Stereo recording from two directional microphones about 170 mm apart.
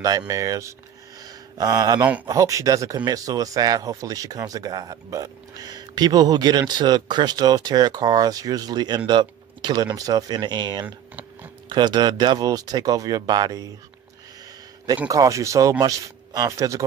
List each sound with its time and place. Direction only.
0.3 s speech: 20° right (ahead or behind)
1.2 s a sound: 20° right (ahead or behind)
2.2 s speech: 20° right (ahead or behind)
15.0 s speech: 20° right (ahead or behind)